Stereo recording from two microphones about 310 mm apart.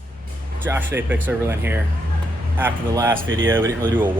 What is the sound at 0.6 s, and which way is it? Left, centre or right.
Speech, centre.